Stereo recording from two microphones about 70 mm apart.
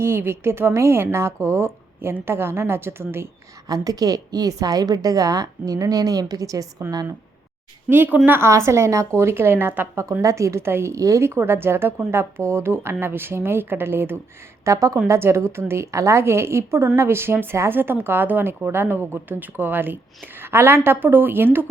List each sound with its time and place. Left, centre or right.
0.0 s a woman's voice: right
3.7 s a woman's voice: right
7.9 s a woman's voice: right
8.4 s a woman's voice: right
10.9 s a woman's voice: right
14.6 s a woman's voice: right